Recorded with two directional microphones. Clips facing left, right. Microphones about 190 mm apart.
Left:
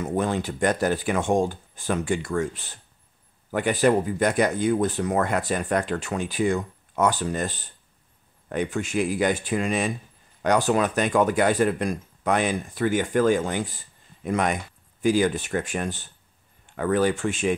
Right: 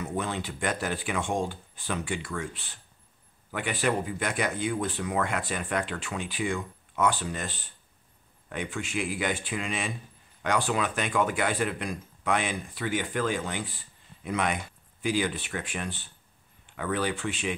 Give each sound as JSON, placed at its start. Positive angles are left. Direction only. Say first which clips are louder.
{"t": 0.0, "sound": "speech", "louder": "left 7 dB", "side_deg": 45}